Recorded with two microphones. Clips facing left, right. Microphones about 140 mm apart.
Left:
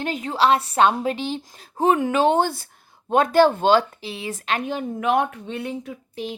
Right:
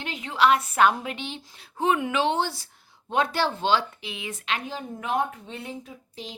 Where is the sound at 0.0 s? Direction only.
45° left (ahead or behind).